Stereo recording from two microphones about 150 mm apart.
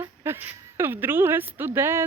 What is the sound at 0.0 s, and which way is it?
A woman's voice, 15° right (ahead or behind).